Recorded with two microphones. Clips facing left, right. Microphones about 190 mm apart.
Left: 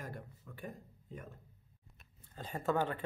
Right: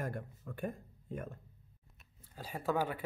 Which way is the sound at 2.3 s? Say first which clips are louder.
Even; 5° right (ahead or behind).